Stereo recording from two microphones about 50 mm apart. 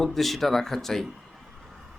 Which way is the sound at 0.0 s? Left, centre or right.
Centre.